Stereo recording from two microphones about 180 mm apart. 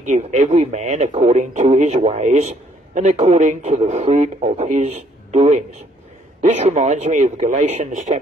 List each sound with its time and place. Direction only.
0.0 s speech: 40° right (ahead or behind)